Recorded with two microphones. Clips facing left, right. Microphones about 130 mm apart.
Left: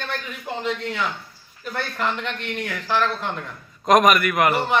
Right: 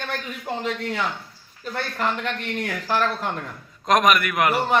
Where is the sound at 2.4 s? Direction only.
40° right (ahead or behind).